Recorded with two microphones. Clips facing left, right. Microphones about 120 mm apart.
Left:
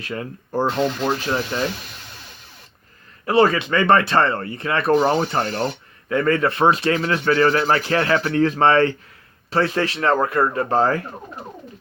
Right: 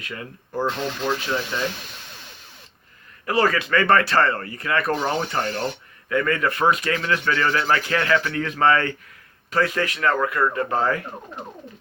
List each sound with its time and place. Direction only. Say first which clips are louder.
0.0 s speech: left 6 dB; 35° left (ahead or behind)
3.2 s speech: left 4 dB; 25° left (ahead or behind)